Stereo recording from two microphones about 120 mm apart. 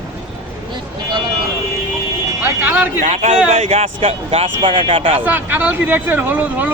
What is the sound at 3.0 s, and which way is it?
Speech, 65° right (ahead or behind).